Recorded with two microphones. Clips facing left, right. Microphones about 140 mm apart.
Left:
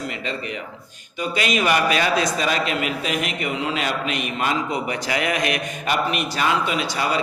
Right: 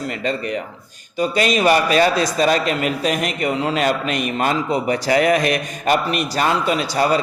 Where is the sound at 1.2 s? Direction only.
35° right (ahead or behind).